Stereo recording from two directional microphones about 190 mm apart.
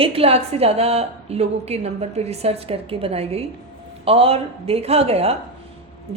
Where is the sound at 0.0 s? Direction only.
30° right (ahead or behind).